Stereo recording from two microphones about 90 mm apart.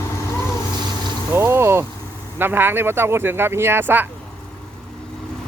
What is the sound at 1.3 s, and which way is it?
Speech, 25° right (ahead or behind).